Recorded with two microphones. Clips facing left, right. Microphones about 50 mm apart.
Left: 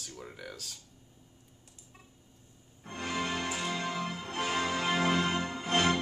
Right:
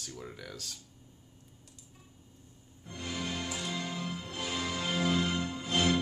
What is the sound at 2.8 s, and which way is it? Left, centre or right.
Music, left.